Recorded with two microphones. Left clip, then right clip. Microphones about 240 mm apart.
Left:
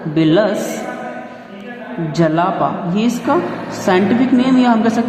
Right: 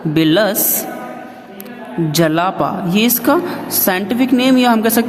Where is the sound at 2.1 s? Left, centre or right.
Right.